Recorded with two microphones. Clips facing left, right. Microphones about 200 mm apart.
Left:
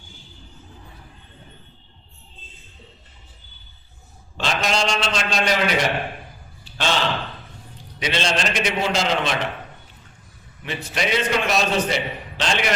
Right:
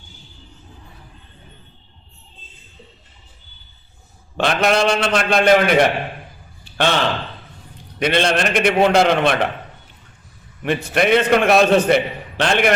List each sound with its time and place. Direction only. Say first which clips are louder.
4.4 s a man's voice: right 6 dB; 60° right (ahead or behind)
10.6 s a man's voice: right 8 dB; 55° right (ahead or behind)